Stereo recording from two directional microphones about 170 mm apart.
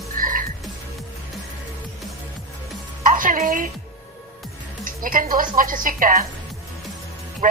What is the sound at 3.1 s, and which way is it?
Music, 50° right (ahead or behind).